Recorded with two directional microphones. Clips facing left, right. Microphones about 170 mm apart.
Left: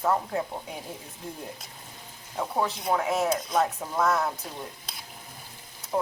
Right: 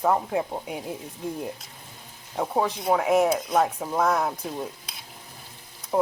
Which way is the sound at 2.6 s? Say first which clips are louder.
Right 3 dB; 10° right (ahead or behind).